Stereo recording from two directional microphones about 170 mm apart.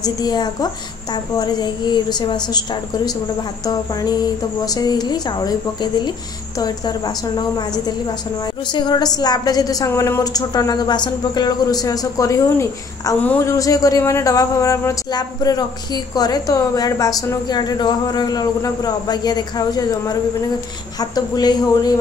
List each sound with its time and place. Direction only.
0.0 s speech: 25° left (ahead or behind)